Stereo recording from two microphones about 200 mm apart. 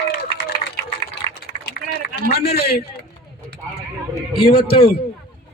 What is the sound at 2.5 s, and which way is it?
Speech, 50° left (ahead or behind).